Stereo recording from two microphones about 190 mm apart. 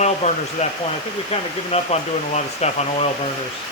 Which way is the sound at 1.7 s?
35° left (ahead or behind).